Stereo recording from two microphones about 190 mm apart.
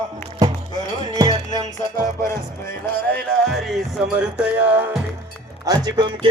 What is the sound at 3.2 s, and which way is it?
Music, centre (ahead or behind).